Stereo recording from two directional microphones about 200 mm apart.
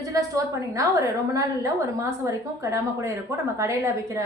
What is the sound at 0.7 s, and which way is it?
A woman's voice, 15° right (ahead or behind).